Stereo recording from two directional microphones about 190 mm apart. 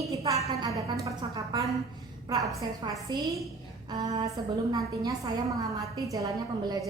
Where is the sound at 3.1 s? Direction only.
20° right (ahead or behind).